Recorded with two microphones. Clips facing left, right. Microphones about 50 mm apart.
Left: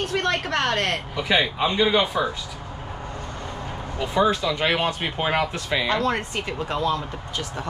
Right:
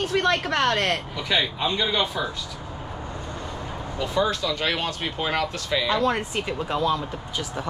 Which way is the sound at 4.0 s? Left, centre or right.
Centre.